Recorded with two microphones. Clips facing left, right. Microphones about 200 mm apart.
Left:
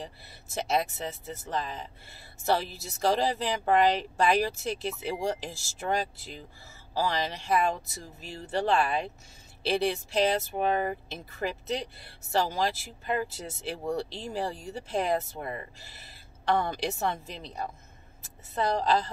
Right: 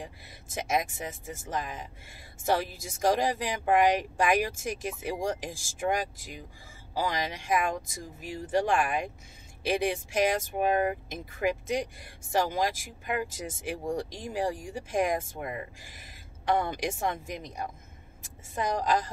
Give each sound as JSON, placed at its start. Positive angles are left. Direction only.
{"t": 0.0, "sound": "speech", "side_deg": -15}
{"t": 5.5, "sound": "speech", "side_deg": -50}
{"t": 5.8, "sound": "a woman's voice", "side_deg": -15}